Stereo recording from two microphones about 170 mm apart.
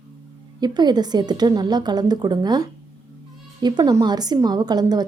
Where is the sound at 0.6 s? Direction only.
25° right (ahead or behind).